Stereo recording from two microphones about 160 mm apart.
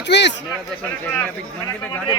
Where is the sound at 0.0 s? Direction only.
90° left.